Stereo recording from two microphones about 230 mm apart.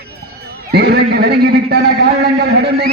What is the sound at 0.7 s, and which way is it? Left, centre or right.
A man's voice, right.